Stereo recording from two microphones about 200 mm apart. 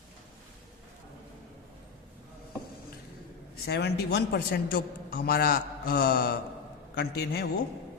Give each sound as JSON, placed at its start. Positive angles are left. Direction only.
{"t": 3.7, "sound": "a man's voice", "side_deg": 55}